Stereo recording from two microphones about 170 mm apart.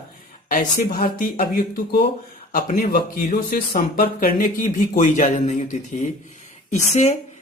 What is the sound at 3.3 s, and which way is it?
A woman's voice, 60° left (ahead or behind).